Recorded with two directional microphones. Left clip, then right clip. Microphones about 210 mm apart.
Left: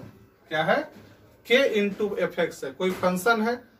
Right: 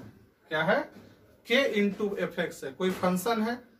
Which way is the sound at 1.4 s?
15° right (ahead or behind).